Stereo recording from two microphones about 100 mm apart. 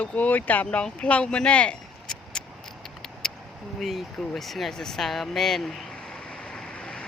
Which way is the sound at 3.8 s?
Centre (ahead or behind).